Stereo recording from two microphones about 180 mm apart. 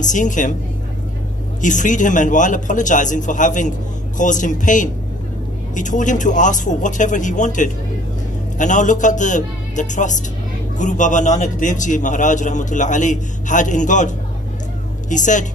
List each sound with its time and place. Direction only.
0.0 s a man's voice: 45° left (ahead or behind)
1.6 s a man's voice: 45° left (ahead or behind)